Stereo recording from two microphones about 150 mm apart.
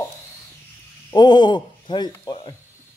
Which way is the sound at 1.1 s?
30° left (ahead or behind).